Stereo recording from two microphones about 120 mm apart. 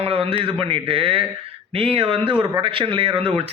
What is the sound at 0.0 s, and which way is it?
Speech, 50° right (ahead or behind).